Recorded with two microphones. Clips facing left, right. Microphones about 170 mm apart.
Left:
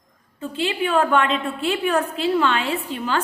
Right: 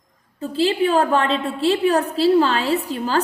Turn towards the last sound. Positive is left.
turn(degrees=-35)  # may be behind; listen again after turning